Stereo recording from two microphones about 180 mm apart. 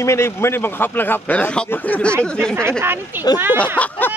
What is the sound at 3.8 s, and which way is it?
Speech, 10° left (ahead or behind).